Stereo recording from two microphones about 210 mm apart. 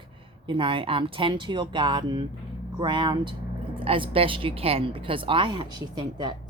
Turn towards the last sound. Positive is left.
turn(degrees=-20)  # may be behind; listen again after turning